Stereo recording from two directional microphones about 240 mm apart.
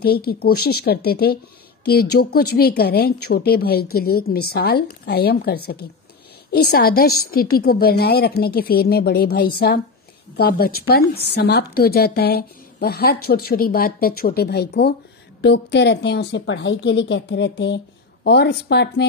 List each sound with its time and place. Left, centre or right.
0.0 s a woman's voice: left